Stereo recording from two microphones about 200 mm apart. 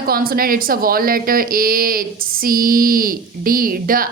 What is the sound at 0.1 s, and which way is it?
Speech, 50° right (ahead or behind).